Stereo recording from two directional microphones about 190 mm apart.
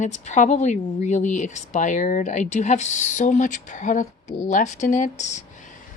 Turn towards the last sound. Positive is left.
turn(degrees=40)  # may be behind; listen again after turning